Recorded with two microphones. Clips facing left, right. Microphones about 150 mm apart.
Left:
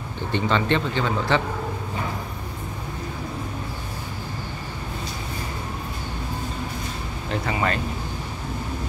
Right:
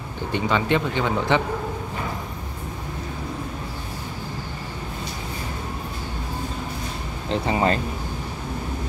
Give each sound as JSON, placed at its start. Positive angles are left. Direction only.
{"t": 0.3, "sound": "speech", "side_deg": -10}
{"t": 7.2, "sound": "speech", "side_deg": -30}